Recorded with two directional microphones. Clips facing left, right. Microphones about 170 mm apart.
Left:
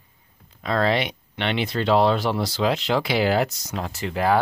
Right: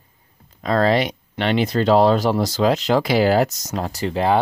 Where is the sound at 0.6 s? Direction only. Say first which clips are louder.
Right 4 dB; 40° right (ahead or behind).